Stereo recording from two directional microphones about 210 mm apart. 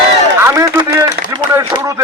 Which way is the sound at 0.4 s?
15° right (ahead or behind).